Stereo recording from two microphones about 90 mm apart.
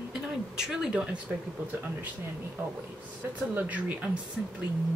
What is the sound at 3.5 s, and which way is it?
Speech, 20° right (ahead or behind).